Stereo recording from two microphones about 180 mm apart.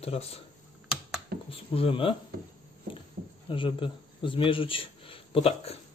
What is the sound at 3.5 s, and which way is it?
Speech, 25° left (ahead or behind).